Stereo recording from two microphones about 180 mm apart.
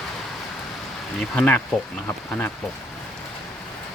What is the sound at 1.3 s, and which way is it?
Speech, 10° left (ahead or behind).